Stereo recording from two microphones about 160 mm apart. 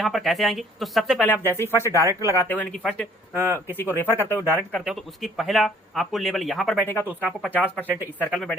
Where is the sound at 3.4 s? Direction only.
15° right (ahead or behind).